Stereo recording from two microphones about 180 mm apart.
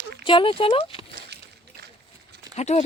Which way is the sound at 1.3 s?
70° right (ahead or behind).